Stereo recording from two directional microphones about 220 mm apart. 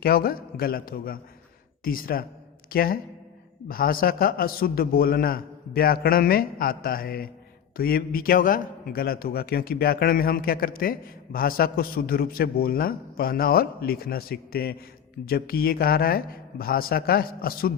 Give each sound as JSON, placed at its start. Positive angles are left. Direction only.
{"t": 0.0, "sound": "a man's voice", "side_deg": 40}